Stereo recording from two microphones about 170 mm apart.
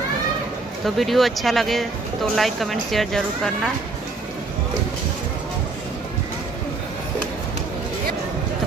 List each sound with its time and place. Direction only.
0.8 s speech: centre (ahead or behind)